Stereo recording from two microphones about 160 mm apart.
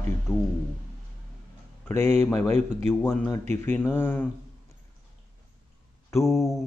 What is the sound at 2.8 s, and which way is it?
Speech, 10° left (ahead or behind).